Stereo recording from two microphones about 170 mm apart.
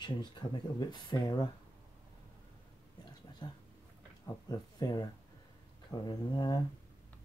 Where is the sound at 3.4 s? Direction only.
25° left (ahead or behind).